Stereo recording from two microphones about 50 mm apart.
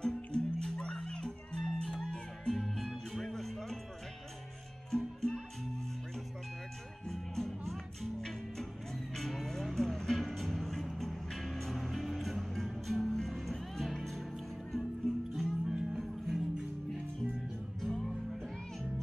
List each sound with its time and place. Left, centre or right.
0.0 s music: centre
2.5 s music: centre
4.9 s music: centre
7.1 s music: centre
15.6 s music: centre
17.7 s music: centre